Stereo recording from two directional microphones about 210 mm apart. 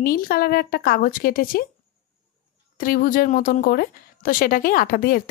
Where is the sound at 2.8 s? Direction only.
40° left (ahead or behind).